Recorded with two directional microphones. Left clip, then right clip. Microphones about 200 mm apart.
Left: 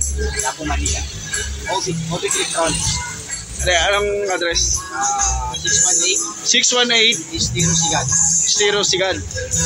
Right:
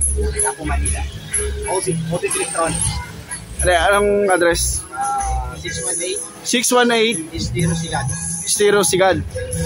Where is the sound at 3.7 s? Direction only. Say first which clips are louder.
Right 2 dB; 40° right (ahead or behind).